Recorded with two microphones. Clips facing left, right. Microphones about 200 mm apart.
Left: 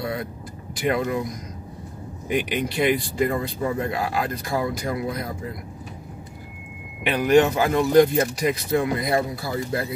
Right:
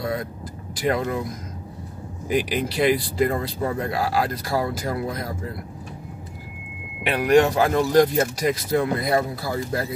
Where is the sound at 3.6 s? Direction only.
40° right (ahead or behind).